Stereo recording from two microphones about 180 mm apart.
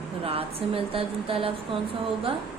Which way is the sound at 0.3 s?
30° right (ahead or behind).